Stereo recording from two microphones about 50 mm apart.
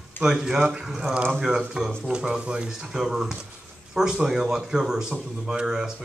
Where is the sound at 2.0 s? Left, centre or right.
Centre.